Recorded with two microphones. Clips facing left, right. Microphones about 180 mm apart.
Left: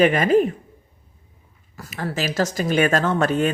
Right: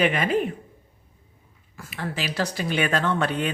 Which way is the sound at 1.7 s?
40° left (ahead or behind).